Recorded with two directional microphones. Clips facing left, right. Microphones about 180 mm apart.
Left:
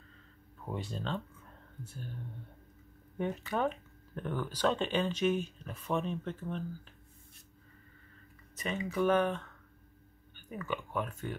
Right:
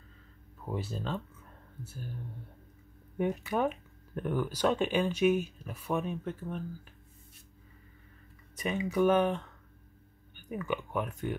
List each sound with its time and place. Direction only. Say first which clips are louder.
0.7 s speech: right 2 dB; 5° right (ahead or behind)
3.2 s speech: right 3 dB; 10° right (ahead or behind)
8.5 s speech: right 4 dB; 15° right (ahead or behind)